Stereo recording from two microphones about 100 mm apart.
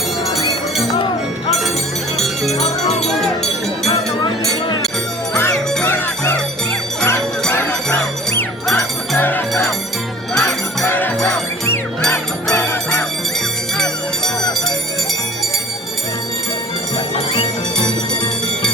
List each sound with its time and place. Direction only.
2.1 s music: centre (ahead or behind)
3.0 s a sound: centre (ahead or behind)
3.8 s chink: 40° left (ahead or behind)
5.8 s music: 25° left (ahead or behind)
7.5 s jingle bell: 15° left (ahead or behind)
8.7 s music: 20° left (ahead or behind)
10.8 s music: 20° left (ahead or behind)
12.1 s music: 25° left (ahead or behind)
17.3 s music: 45° left (ahead or behind)